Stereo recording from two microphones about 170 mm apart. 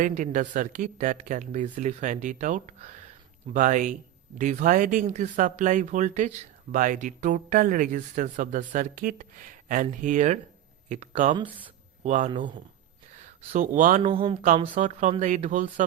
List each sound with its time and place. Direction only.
0.0 s speech: 50° right (ahead or behind)
13.5 s speech: 50° right (ahead or behind)
14.1 s speech: 30° right (ahead or behind)
14.8 s speech: 50° right (ahead or behind)